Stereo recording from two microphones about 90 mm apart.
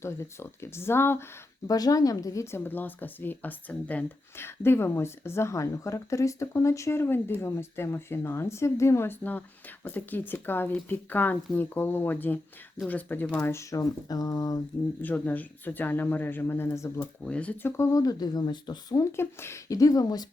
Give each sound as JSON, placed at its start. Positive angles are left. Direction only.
{"t": 0.0, "sound": "speech", "side_deg": 30}
{"t": 1.6, "sound": "speech", "side_deg": 45}
{"t": 4.4, "sound": "speech", "side_deg": 25}
{"t": 13.4, "sound": "speech", "side_deg": 30}
{"t": 15.0, "sound": "speech", "side_deg": 20}
{"t": 17.0, "sound": "speech", "side_deg": 15}
{"t": 17.6, "sound": "speech", "side_deg": 30}
{"t": 19.1, "sound": "speech", "side_deg": 30}